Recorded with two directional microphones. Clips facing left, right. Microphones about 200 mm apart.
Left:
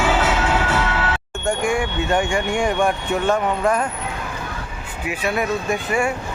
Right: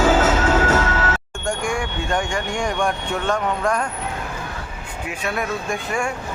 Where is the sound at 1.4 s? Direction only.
5° left (ahead or behind).